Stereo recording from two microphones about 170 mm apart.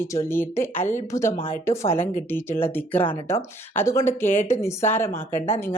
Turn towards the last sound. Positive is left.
turn(degrees=15)  # may be behind; listen again after turning